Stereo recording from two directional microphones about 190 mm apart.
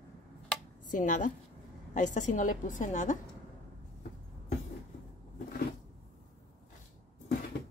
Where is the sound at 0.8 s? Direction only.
45° left (ahead or behind).